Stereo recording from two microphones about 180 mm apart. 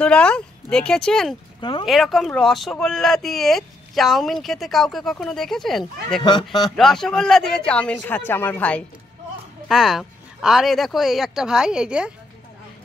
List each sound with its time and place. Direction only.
0.0 s speech: 5° left (ahead or behind)
1.6 s speech: 25° left (ahead or behind)
1.9 s speech: centre (ahead or behind)